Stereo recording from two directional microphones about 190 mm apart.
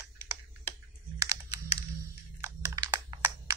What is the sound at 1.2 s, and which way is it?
Typing, 20° right (ahead or behind).